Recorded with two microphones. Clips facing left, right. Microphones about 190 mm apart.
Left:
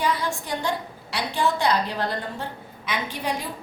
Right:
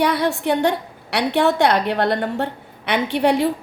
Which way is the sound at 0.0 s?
70° right (ahead or behind).